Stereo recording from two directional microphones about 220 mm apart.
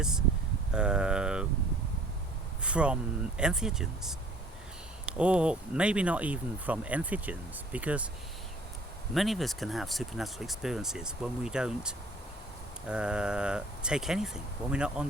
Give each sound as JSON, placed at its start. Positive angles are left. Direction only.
{"t": 0.0, "sound": "speech", "side_deg": -5}
{"t": 2.6, "sound": "speech", "side_deg": -5}
{"t": 9.1, "sound": "speech", "side_deg": 0}